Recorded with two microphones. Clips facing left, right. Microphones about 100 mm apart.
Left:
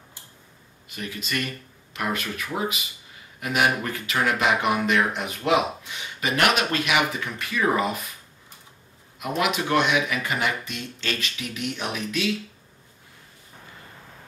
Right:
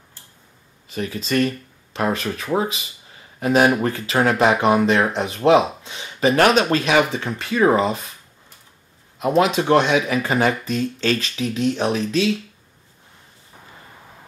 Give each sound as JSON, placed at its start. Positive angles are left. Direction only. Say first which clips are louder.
{"t": 0.8, "sound": "speech", "louder": "right 8 dB", "side_deg": -35}
{"t": 9.2, "sound": "speech", "louder": "right 8 dB", "side_deg": -30}